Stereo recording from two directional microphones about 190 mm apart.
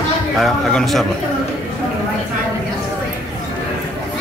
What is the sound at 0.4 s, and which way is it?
Speech, centre (ahead or behind).